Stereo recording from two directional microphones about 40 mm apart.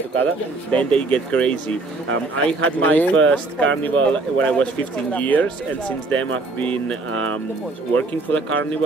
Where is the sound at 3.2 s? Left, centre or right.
Left.